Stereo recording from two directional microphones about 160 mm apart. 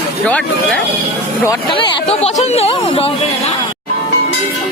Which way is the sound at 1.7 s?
40° left (ahead or behind).